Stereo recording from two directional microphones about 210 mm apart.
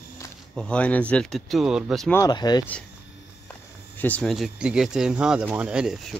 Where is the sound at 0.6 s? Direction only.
5° left (ahead or behind).